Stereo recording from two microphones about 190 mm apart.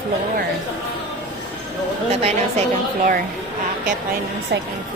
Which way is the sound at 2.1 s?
35° right (ahead or behind).